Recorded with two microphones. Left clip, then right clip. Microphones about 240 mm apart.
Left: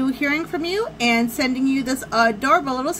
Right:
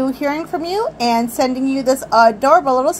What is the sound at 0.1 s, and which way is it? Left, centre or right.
A woman's voice, left.